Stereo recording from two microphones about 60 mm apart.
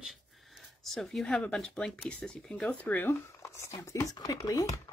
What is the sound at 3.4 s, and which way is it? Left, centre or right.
Speech, left.